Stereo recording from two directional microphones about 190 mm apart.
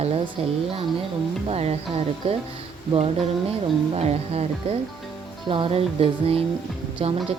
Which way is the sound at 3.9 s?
35° right (ahead or behind).